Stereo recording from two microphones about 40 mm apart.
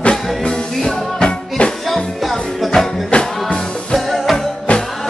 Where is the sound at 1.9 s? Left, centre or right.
Centre.